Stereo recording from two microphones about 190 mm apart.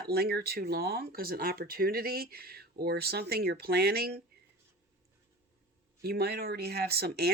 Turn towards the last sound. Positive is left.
turn(degrees=-55)  # may be behind; listen again after turning